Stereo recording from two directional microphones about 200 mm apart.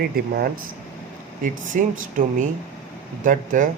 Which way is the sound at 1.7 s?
40° right (ahead or behind).